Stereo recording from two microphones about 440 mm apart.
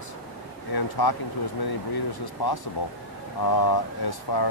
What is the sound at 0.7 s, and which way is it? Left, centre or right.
Speech, left.